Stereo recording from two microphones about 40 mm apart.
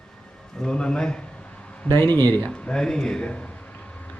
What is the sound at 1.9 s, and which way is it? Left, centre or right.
Speech, left.